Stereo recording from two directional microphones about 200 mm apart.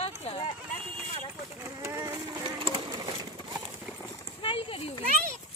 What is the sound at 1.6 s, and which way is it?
Speech, 15° right (ahead or behind).